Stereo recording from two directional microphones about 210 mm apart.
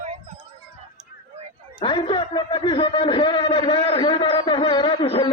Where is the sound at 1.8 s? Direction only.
25° left (ahead or behind).